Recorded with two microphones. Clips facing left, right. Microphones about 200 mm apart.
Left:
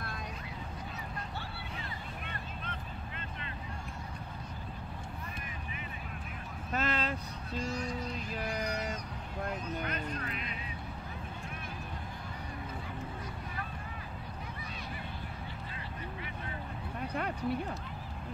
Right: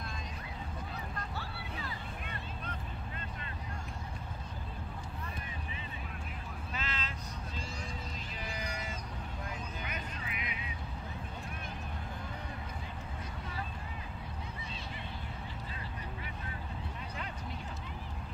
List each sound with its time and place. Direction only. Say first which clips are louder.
6.7 s vehicle: left 10 dB; 50° left (ahead or behind)
9.8 s music: left 5 dB; 10° right (ahead or behind)
17.1 s a sound: left 13 dB; 60° left (ahead or behind)